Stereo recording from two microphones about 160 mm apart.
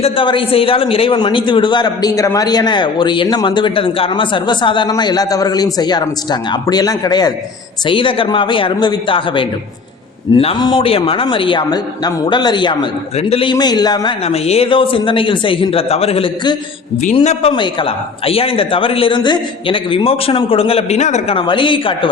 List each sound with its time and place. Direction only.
0.0 s a man's voice: 35° left (ahead or behind)
21.3 s speech: 30° left (ahead or behind)